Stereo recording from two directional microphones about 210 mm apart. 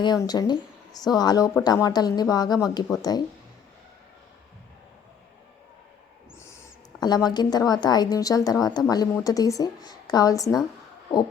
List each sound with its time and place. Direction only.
0.0 s speech: 20° left (ahead or behind)
7.0 s a woman's voice: 20° left (ahead or behind)